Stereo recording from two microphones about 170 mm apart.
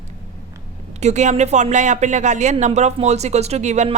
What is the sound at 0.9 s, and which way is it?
Speech, 40° right (ahead or behind).